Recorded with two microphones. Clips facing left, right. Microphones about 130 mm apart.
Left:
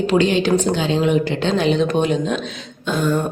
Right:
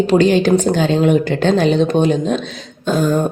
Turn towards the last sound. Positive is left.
turn(degrees=-40)  # may be behind; listen again after turning